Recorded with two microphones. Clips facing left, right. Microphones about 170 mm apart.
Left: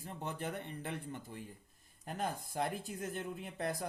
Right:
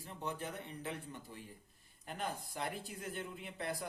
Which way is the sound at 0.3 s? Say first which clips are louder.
Left 3 dB; 55° left (ahead or behind).